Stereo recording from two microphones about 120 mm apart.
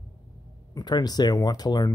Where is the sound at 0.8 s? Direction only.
35° left (ahead or behind).